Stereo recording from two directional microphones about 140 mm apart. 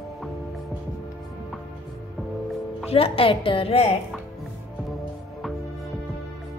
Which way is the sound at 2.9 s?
40° left (ahead or behind).